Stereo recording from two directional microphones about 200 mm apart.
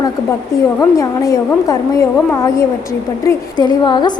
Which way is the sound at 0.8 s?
15° left (ahead or behind).